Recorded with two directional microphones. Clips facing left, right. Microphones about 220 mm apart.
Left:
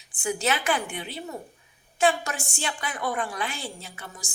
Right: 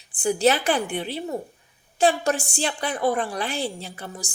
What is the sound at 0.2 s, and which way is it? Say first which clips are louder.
A woman's voice: right 7 dB; 35° right (ahead or behind).